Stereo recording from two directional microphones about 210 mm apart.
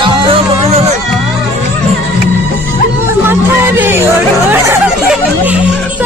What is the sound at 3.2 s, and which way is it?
Chatter, 10° right (ahead or behind).